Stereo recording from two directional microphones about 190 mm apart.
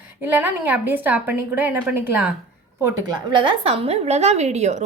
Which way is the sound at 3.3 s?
25° right (ahead or behind).